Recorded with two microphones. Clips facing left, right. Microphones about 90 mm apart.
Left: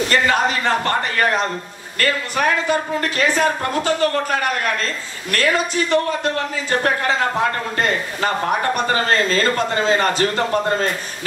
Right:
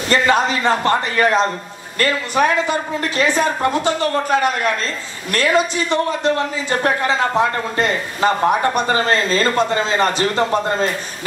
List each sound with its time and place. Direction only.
0.1 s a man's voice: 20° right (ahead or behind)